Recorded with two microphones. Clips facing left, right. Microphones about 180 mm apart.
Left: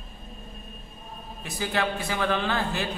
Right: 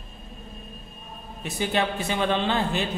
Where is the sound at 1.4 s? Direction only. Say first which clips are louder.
Right 3 dB; 20° right (ahead or behind).